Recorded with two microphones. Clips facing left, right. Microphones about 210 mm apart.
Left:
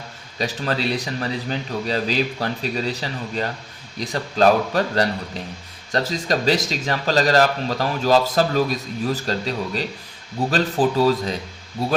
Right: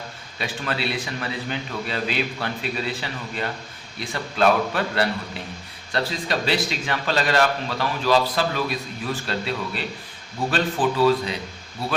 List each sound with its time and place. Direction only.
0.3 s a man's voice: 35° left (ahead or behind)